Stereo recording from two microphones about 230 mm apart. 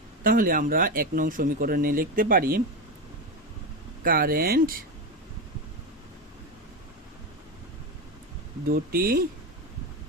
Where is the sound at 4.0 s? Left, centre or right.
Right.